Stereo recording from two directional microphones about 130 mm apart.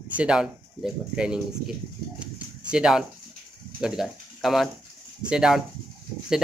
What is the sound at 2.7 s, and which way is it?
Speech, 5° right (ahead or behind).